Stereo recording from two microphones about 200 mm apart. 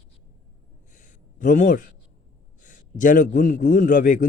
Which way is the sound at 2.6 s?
40° left (ahead or behind).